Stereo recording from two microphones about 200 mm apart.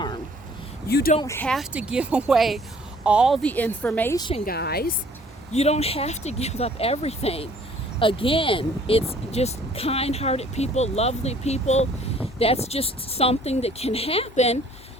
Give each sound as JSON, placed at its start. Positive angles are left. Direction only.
{"t": 0.9, "sound": "a woman's voice", "side_deg": 55}
{"t": 1.2, "sound": "speech", "side_deg": 10}
{"t": 1.7, "sound": "speech", "side_deg": -5}
{"t": 4.2, "sound": "a woman's voice", "side_deg": 25}
{"t": 4.4, "sound": "a woman's voice", "side_deg": 50}
{"t": 5.5, "sound": "speech", "side_deg": 35}